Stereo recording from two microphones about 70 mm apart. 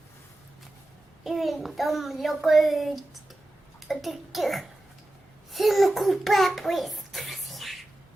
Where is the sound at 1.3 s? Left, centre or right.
Centre.